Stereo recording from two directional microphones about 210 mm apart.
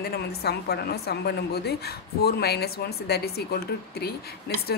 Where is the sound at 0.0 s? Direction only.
50° left (ahead or behind).